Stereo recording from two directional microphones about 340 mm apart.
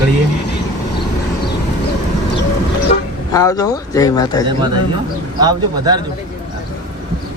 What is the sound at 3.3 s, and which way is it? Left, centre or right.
Speech, centre.